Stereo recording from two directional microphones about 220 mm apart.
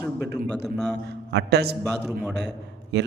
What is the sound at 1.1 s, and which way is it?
Speech, 50° right (ahead or behind).